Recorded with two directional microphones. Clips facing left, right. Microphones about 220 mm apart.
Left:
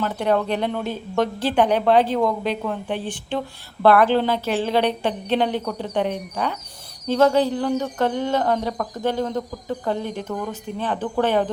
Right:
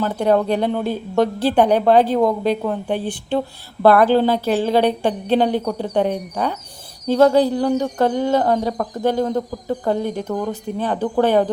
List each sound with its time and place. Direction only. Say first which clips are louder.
0.0 s speech: right 4 dB; 40° right (ahead or behind)